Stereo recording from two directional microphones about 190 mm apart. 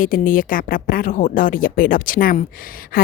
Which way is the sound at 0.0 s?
45° left (ahead or behind).